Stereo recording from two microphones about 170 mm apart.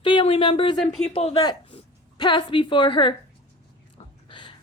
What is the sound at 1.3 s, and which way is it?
A woman's voice, 25° left (ahead or behind).